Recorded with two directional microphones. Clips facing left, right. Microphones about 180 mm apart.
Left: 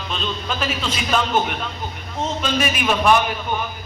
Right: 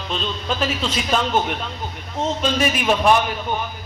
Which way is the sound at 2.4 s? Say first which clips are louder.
Even; 30° right (ahead or behind).